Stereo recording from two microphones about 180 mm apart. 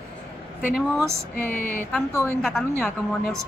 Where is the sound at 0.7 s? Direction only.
10° right (ahead or behind).